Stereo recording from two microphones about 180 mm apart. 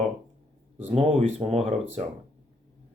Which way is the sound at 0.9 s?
35° right (ahead or behind).